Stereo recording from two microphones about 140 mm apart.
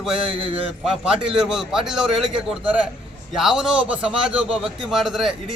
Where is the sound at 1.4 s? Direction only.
5° right (ahead or behind).